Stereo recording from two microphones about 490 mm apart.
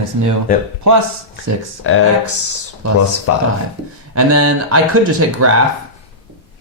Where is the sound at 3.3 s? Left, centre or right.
Left.